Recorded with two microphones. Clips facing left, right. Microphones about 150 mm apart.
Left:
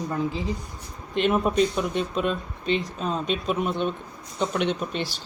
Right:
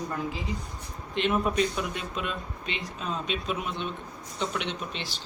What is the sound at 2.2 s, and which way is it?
Speech, 35° left (ahead or behind).